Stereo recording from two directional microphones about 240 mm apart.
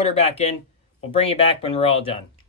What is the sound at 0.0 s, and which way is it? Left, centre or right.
Speech, left.